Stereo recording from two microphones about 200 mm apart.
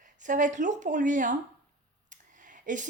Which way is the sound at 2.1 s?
40° right (ahead or behind).